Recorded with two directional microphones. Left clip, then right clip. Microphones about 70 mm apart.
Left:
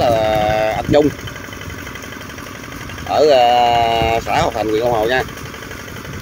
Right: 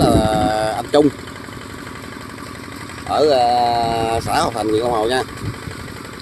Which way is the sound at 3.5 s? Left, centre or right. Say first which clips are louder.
Left 4 dB; right.